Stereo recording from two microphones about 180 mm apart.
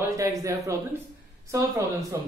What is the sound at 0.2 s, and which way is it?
Speech, 20° right (ahead or behind).